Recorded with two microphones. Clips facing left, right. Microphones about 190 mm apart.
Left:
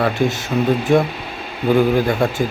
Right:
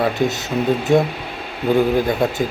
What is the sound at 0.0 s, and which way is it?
A man's voice, 20° right (ahead or behind).